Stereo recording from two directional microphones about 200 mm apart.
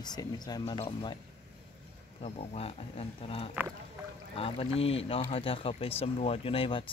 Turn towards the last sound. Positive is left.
turn(degrees=25)  # may be behind; listen again after turning